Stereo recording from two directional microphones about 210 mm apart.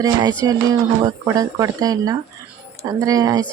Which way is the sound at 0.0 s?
20° right (ahead or behind).